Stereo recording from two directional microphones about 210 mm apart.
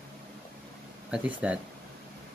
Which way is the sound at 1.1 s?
5° right (ahead or behind).